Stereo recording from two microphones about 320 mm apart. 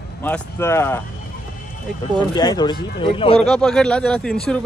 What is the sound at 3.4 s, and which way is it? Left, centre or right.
Speech, centre.